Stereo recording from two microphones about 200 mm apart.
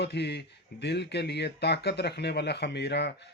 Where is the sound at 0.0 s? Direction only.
55° left (ahead or behind).